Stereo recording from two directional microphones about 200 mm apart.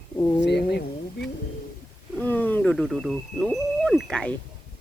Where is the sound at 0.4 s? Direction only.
55° left (ahead or behind).